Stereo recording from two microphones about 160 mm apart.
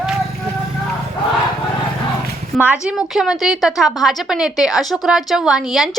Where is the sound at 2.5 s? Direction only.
10° right (ahead or behind).